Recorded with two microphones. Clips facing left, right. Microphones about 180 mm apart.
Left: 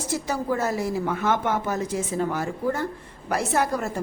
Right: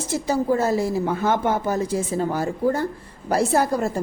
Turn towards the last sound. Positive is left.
turn(degrees=-35)  # may be behind; listen again after turning